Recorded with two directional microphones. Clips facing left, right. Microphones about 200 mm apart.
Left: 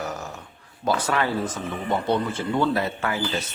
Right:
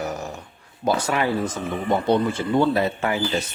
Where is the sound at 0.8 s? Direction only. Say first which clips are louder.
Right 2 dB; 15° right (ahead or behind).